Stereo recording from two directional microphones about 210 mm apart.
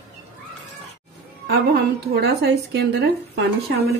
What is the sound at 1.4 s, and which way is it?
Speech, 50° right (ahead or behind).